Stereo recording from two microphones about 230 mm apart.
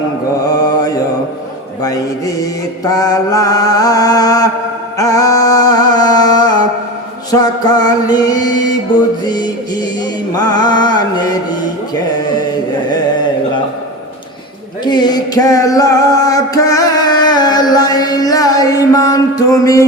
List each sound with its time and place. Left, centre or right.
0.4 s mantra: centre
4.9 s music: centre
7.3 s mantra: centre
14.8 s music: centre